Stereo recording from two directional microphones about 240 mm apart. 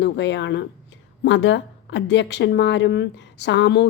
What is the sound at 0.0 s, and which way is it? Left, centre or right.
Speech, left.